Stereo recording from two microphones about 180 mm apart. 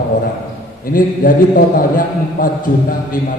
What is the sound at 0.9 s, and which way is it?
A man's voice, 50° left (ahead or behind).